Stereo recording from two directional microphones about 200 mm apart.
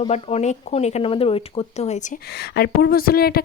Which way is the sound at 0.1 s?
35° left (ahead or behind).